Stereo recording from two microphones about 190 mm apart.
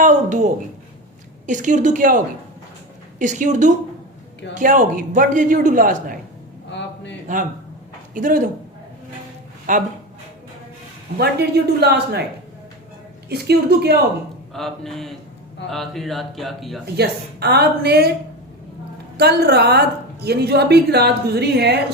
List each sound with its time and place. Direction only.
0.0 s a woman's voice: 40° right (ahead or behind)
6.7 s a sound: 65° left (ahead or behind)
8.1 s a man's voice: 45° right (ahead or behind)
9.7 s a man's voice: 45° right (ahead or behind)
11.2 s a woman's voice: 60° right (ahead or behind)
13.2 s a woman's voice: 55° right (ahead or behind)
14.5 s speech: centre (ahead or behind)
16.8 s a woman's voice: 60° right (ahead or behind)
19.1 s a woman's voice: 60° right (ahead or behind)